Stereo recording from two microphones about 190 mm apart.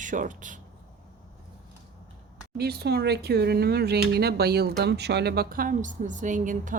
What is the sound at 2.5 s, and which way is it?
Speech, 55° right (ahead or behind).